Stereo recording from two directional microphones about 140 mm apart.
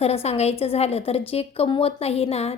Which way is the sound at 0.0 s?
45° left (ahead or behind).